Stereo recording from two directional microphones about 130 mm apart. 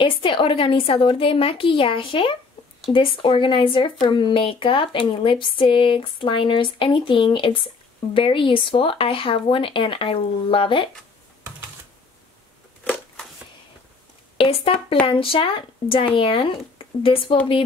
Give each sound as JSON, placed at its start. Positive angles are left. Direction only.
{"t": 0.0, "sound": "a woman's voice", "side_deg": 40}
{"t": 14.4, "sound": "a woman's voice", "side_deg": 45}